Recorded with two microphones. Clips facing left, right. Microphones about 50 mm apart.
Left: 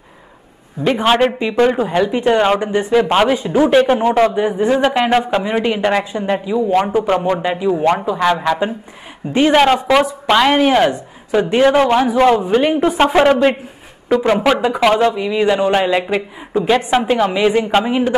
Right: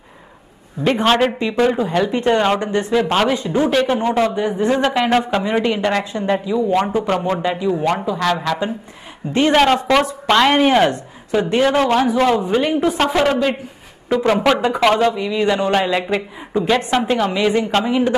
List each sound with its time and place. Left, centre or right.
0.8 s a woman's voice: centre
10.9 s a woman's voice: centre
14.1 s speech: centre